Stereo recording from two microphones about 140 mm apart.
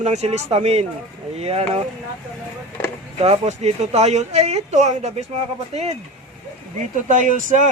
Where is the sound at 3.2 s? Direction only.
50° right (ahead or behind).